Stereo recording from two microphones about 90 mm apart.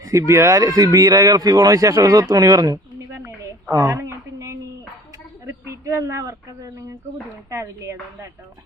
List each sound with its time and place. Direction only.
0.0 s speech: 35° right (ahead or behind)
3.2 s a sound: 35° right (ahead or behind)
5.5 s speech: 30° right (ahead or behind)